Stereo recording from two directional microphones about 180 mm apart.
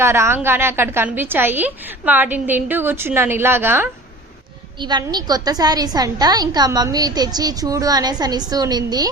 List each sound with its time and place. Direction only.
0.0 s a woman's voice: 15° right (ahead or behind)
4.8 s a woman's voice: 25° right (ahead or behind)